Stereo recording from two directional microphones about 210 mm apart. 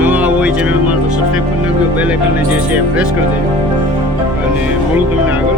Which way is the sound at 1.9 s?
5° right (ahead or behind).